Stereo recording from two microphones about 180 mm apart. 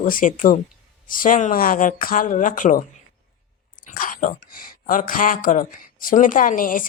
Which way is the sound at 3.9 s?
50° left (ahead or behind).